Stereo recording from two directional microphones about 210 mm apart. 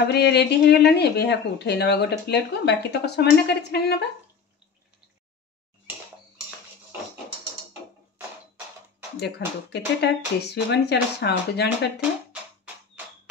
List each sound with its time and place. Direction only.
0.1 s speech: 50° left (ahead or behind)
9.2 s speech: 55° left (ahead or behind)